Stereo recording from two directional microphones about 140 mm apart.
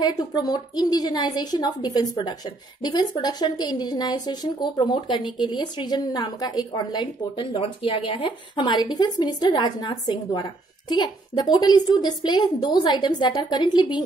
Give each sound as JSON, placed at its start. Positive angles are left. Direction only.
{"t": 0.0, "sound": "a woman's voice", "side_deg": 30}